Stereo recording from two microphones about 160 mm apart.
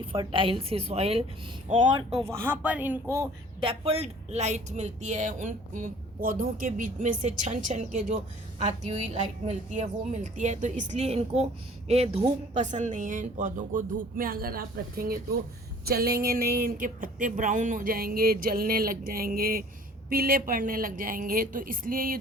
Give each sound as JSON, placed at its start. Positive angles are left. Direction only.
{"t": 0.0, "sound": "a woman's voice", "side_deg": -30}
{"t": 2.2, "sound": "speech", "side_deg": -15}
{"t": 3.6, "sound": "speech", "side_deg": -35}
{"t": 12.5, "sound": "speech", "side_deg": -50}